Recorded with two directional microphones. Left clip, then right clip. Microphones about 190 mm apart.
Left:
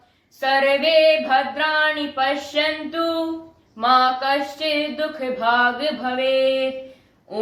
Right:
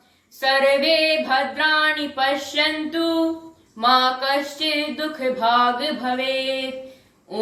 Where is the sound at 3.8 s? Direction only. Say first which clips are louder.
Left 1 dB; 10° left (ahead or behind).